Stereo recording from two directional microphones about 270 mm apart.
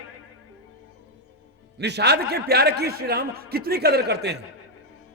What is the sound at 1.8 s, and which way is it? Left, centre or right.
Speech, right.